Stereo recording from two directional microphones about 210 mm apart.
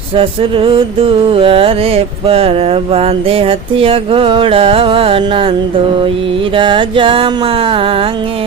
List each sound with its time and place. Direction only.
0.2 s music: 25° right (ahead or behind)